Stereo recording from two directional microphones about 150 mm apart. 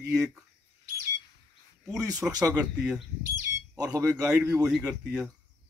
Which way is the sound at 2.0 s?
25° right (ahead or behind).